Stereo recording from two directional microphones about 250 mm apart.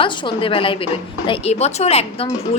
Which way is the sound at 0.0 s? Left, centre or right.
Centre.